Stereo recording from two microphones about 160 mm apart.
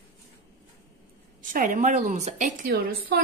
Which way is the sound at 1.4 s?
55° right (ahead or behind).